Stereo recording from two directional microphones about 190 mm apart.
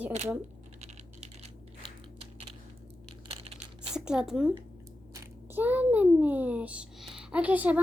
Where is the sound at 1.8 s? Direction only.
30° right (ahead or behind).